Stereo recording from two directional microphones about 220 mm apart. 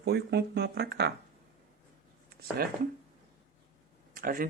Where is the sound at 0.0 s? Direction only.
50° right (ahead or behind).